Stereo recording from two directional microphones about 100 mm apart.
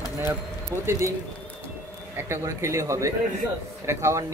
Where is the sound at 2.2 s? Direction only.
30° right (ahead or behind).